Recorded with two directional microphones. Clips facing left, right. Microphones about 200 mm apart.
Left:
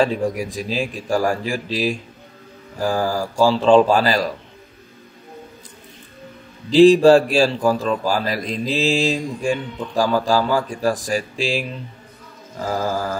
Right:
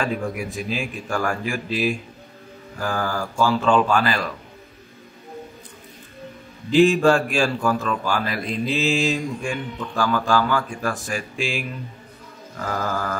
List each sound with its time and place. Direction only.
0.0 s a man's voice: 35° left (ahead or behind)
6.7 s a man's voice: 35° left (ahead or behind)